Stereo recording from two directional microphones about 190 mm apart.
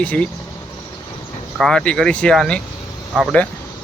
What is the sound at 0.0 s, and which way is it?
Speech, 5° left (ahead or behind).